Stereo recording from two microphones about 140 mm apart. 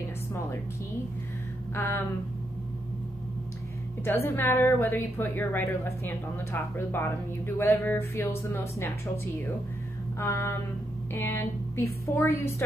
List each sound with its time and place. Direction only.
1.8 s a woman's voice: 15° left (ahead or behind)
4.0 s a woman's voice: 15° left (ahead or behind)
10.1 s a sound: 20° left (ahead or behind)
11.1 s a woman's voice: 15° left (ahead or behind)